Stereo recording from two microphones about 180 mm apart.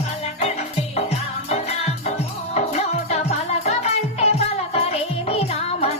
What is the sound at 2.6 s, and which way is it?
Music, 35° left (ahead or behind).